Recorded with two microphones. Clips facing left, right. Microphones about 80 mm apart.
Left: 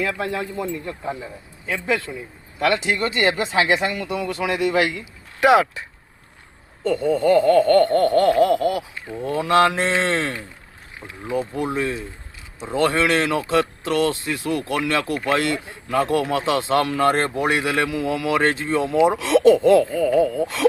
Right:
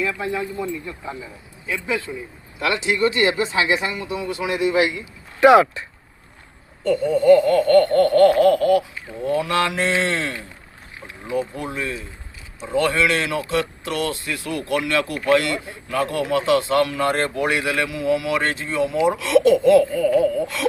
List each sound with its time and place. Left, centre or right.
0.0 s speech: left
2.6 s speech: left
5.4 s speech: centre
6.8 s speech: left
9.3 s speech: left
17.2 s speech: left